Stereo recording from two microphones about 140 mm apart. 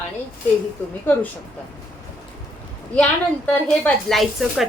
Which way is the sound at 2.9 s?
10° left (ahead or behind).